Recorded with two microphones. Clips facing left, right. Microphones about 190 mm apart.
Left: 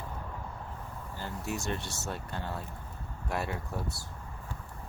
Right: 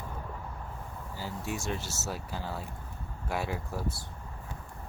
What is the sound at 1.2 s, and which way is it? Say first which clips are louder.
Speech: even; centre (ahead or behind).